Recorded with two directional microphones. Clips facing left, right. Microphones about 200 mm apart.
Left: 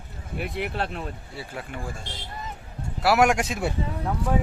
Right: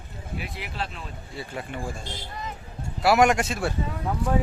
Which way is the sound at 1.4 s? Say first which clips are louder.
Right 3 dB; 5° left (ahead or behind).